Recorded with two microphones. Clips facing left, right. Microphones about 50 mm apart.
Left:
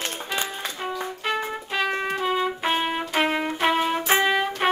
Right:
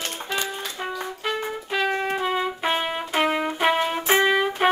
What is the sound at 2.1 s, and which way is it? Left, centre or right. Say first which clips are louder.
Trumpet: even; centre.